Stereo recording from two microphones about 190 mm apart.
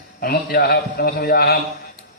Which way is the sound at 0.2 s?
50° left (ahead or behind).